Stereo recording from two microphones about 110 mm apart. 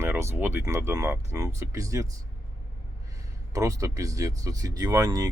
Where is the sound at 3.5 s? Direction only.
30° right (ahead or behind).